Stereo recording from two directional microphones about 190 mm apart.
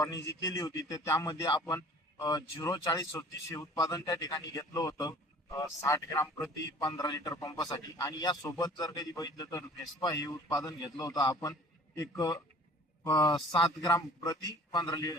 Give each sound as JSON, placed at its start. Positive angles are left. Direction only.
{"t": 0.0, "sound": "a man's voice", "side_deg": 15}